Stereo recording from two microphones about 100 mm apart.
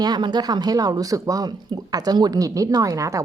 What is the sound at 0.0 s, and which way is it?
A woman's voice, 45° right (ahead or behind).